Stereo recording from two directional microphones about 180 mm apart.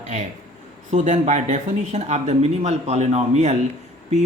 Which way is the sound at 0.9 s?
40° right (ahead or behind).